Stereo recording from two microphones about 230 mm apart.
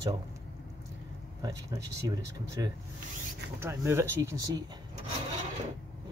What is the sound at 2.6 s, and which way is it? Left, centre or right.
Speech, centre.